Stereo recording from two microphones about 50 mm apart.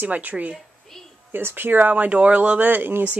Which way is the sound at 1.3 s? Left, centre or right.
Right.